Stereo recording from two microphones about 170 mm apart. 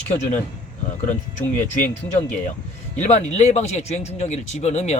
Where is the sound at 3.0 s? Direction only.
40° left (ahead or behind).